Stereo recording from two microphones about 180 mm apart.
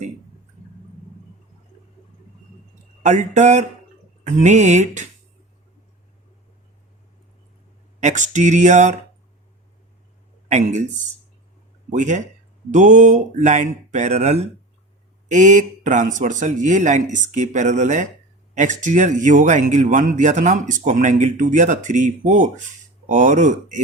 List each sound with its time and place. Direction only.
3.0 s speech: 40° right (ahead or behind)
8.0 s speech: 45° right (ahead or behind)
10.5 s speech: 40° right (ahead or behind)